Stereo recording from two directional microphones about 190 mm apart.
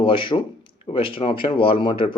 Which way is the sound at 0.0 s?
25° left (ahead or behind).